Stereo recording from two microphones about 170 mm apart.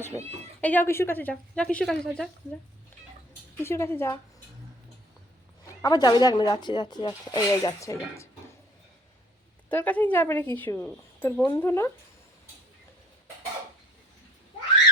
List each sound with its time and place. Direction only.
0.1 s a woman's voice: 20° left (ahead or behind); by 2.3 s 5° left (ahead or behind)
3.6 s a woman's voice: 15° left (ahead or behind)
5.8 s speech: 20° left (ahead or behind)
9.6 s a woman's voice: 10° left (ahead or behind)